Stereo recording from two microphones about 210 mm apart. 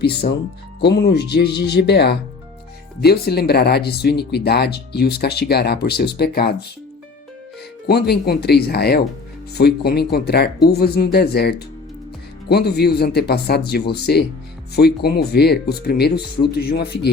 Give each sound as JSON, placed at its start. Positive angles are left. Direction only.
{"t": 0.0, "sound": "speech", "side_deg": 50}
{"t": 7.9, "sound": "speech", "side_deg": 50}